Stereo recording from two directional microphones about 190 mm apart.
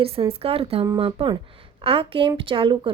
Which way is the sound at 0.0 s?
30° right (ahead or behind).